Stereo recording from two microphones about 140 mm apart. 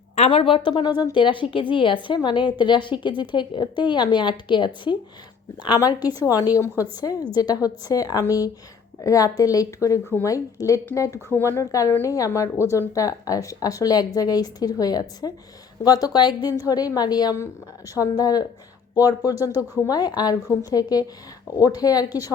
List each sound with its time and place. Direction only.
0.3 s a woman's voice: 40° left (ahead or behind)
19.4 s speech: 15° right (ahead or behind)
19.9 s speech: 30° left (ahead or behind)